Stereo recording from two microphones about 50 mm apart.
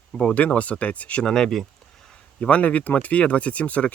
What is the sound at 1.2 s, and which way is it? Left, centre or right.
Speech, centre.